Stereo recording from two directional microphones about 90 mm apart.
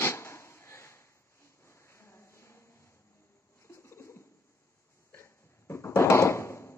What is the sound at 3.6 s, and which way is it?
Bird, 30° left (ahead or behind).